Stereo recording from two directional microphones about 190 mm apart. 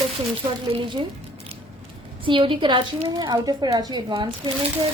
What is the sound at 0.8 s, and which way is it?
Speech, 25° right (ahead or behind).